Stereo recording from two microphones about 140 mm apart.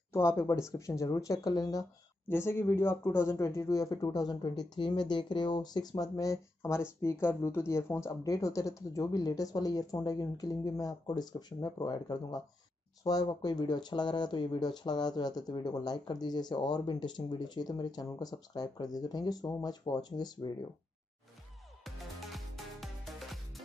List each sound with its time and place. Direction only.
0.1 s speech: 20° left (ahead or behind)
21.8 s music: centre (ahead or behind)